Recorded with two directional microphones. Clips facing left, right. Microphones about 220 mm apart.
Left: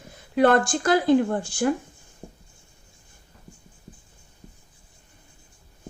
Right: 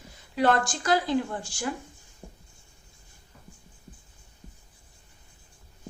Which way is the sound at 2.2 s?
15° left (ahead or behind).